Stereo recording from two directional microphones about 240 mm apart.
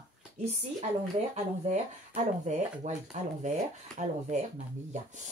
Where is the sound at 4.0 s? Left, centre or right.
Right.